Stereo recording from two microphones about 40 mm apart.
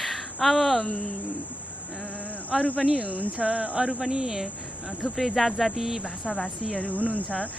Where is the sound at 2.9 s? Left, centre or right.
Right.